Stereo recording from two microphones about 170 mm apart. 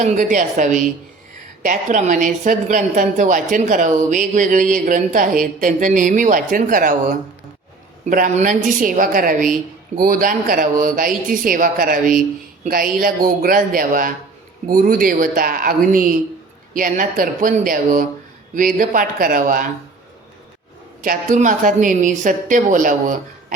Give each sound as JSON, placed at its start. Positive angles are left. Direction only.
{"t": 0.0, "sound": "a woman's voice", "side_deg": -50}
{"t": 21.0, "sound": "a woman's voice", "side_deg": -50}